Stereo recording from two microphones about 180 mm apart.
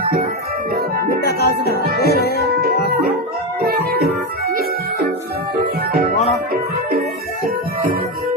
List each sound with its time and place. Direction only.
0.0 s music: 55° right (ahead or behind)
1.2 s music: 65° left (ahead or behind)
1.6 s music: 60° right (ahead or behind)